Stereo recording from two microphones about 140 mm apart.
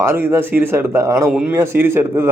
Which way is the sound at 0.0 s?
20° right (ahead or behind).